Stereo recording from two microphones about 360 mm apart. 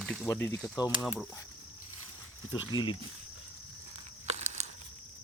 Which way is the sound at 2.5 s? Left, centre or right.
Centre.